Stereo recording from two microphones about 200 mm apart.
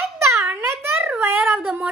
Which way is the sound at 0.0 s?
15° right (ahead or behind).